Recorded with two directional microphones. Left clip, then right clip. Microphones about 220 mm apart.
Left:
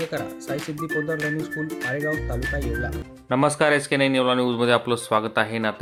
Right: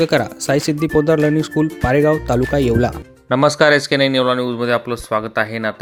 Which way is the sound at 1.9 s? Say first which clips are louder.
Right 12 dB; 45° right (ahead or behind).